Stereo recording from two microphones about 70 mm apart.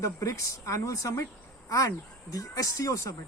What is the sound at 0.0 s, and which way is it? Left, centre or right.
Speech, left.